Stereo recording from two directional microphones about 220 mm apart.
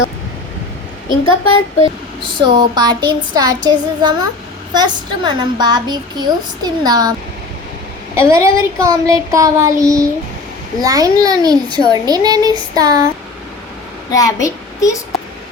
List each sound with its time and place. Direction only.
2.2 s a woman's voice: 20° right (ahead or behind)
8.1 s a child's voice: 15° right (ahead or behind)
14.1 s a child's voice: 15° left (ahead or behind)